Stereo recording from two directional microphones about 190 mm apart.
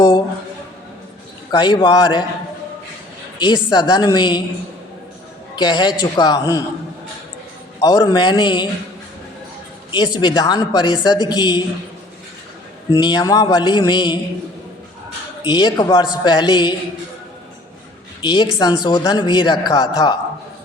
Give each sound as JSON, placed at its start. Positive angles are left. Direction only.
{"t": 1.5, "sound": "speech", "side_deg": 20}
{"t": 3.3, "sound": "speech", "side_deg": 25}
{"t": 5.5, "sound": "speech", "side_deg": 25}
{"t": 7.8, "sound": "speech", "side_deg": 20}
{"t": 10.2, "sound": "speech", "side_deg": 20}
{"t": 12.9, "sound": "speech", "side_deg": 25}
{"t": 15.4, "sound": "speech", "side_deg": 20}
{"t": 18.2, "sound": "a woman's voice", "side_deg": 25}